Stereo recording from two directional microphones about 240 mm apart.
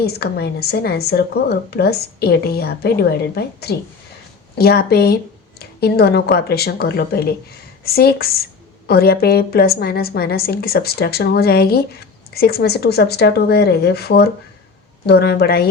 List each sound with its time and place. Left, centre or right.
0.0 s a woman's voice: left